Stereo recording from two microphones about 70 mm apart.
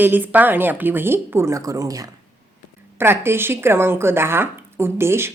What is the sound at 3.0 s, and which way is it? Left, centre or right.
A woman's voice, right.